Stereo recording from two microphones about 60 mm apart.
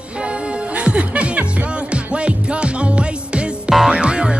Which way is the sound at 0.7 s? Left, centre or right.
Right.